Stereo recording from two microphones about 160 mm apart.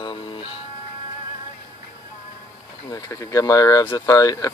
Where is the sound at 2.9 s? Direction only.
20° left (ahead or behind).